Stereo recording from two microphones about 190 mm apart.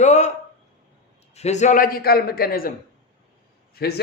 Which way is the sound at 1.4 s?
35° left (ahead or behind).